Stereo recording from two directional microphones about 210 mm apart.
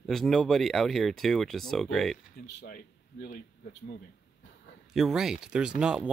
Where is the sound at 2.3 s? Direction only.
50° left (ahead or behind).